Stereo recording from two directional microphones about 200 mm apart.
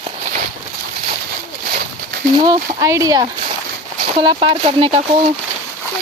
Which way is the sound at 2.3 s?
20° right (ahead or behind).